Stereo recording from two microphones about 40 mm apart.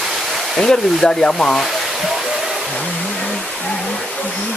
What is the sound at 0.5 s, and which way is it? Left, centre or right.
Speech, centre.